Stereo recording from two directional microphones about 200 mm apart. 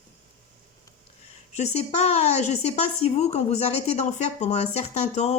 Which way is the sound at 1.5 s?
35° left (ahead or behind).